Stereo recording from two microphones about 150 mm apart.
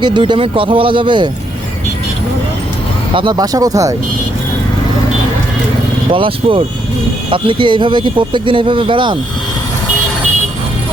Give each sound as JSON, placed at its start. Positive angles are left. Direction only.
{"t": 0.0, "sound": "speech", "side_deg": -30}
{"t": 3.2, "sound": "speech", "side_deg": -30}
{"t": 6.1, "sound": "speech", "side_deg": -35}